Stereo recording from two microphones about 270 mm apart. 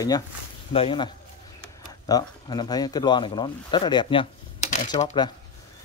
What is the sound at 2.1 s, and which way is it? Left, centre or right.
Speech, centre.